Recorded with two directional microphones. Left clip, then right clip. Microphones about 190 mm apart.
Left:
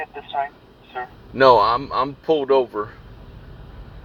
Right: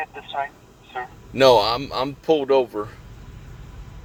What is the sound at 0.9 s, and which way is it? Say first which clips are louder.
A man's voice: even; 25° right (ahead or behind).